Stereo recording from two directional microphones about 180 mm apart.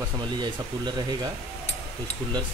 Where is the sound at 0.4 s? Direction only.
25° right (ahead or behind).